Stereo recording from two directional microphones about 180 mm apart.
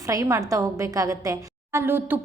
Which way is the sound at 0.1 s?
15° right (ahead or behind).